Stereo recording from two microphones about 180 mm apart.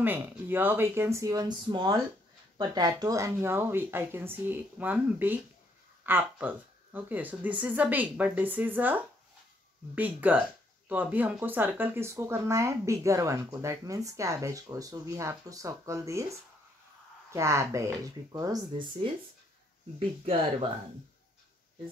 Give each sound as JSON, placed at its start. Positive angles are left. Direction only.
{"t": 0.0, "sound": "speech", "side_deg": -10}
{"t": 17.3, "sound": "speech", "side_deg": -15}